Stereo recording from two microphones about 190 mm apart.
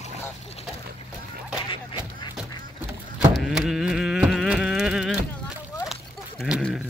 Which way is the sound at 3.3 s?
Centre (ahead or behind).